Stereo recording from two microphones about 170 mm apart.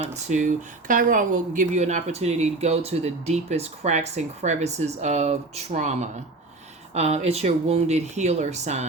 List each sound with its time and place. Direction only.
0.0 s speech: 40° right (ahead or behind)